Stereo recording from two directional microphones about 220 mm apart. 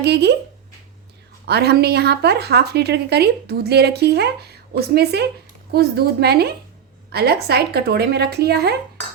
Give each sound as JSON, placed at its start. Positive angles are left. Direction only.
{"t": 0.0, "sound": "a woman's voice", "side_deg": -50}
{"t": 1.5, "sound": "a woman's voice", "side_deg": -50}